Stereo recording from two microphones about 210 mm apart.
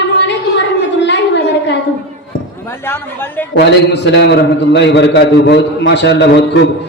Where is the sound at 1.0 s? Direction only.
55° left (ahead or behind).